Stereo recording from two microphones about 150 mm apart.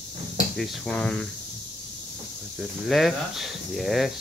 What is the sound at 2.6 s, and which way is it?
Speech, centre (ahead or behind).